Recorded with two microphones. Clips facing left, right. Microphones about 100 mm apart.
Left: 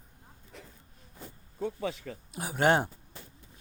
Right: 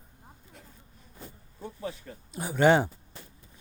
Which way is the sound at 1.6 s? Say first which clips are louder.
Left 4 dB; 90° left.